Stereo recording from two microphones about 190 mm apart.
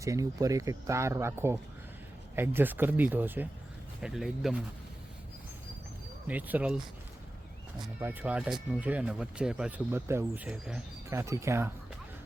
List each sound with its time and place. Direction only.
0.0 s speech: 15° right (ahead or behind)
6.2 s speech: 10° right (ahead or behind)
8.0 s speech: 10° right (ahead or behind)
11.1 s speech: 15° right (ahead or behind)